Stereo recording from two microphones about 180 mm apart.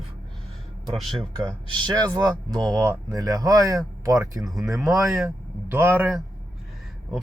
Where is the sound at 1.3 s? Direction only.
25° right (ahead or behind).